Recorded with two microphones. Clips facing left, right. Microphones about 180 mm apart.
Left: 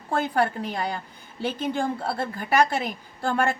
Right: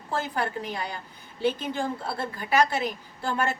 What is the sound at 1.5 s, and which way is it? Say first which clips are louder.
A woman's voice: left 4 dB; 50° left (ahead or behind).